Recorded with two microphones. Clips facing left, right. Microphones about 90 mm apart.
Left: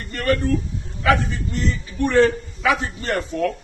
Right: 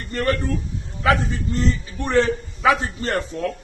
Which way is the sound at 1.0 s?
30° right (ahead or behind).